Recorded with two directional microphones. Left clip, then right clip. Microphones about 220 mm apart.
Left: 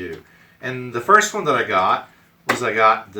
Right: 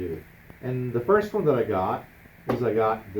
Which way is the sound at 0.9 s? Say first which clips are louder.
Left 8 dB; 30° left (ahead or behind).